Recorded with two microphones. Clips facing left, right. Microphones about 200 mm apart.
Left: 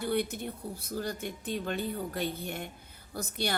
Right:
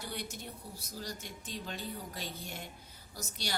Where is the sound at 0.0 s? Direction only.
55° left (ahead or behind).